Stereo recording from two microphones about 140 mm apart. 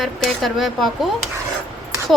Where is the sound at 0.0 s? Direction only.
Centre (ahead or behind).